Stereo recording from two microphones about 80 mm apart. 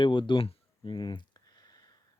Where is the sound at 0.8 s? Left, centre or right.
Left.